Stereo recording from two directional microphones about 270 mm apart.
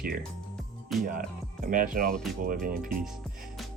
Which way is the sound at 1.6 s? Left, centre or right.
Right.